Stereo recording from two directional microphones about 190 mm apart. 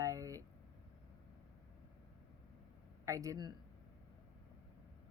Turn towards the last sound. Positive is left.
turn(degrees=-20)  # may be behind; listen again after turning